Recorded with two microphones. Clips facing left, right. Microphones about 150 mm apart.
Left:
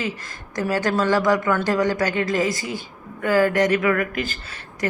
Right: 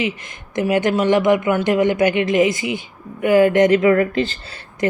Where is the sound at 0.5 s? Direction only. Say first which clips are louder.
Right 4 dB; 20° right (ahead or behind).